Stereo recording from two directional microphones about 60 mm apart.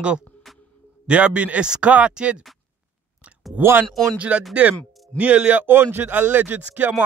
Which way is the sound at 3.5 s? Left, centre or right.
Right.